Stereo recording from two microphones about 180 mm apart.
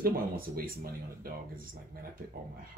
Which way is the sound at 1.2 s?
55° right (ahead or behind).